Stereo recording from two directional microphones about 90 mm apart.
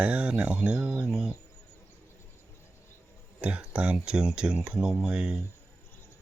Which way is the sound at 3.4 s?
15° right (ahead or behind).